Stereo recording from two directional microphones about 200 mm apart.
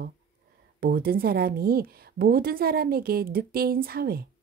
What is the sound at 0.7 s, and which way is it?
Speech, 50° right (ahead or behind).